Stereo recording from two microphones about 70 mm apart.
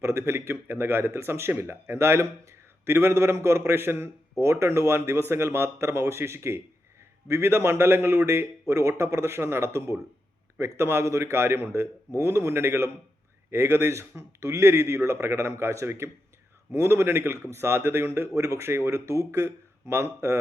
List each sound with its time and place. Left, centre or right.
0.0 s speech: right